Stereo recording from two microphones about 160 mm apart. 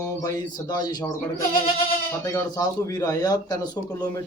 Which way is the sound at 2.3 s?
20° left (ahead or behind).